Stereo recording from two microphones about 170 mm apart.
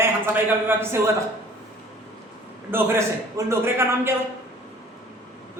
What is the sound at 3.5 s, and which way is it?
Speech, 15° right (ahead or behind).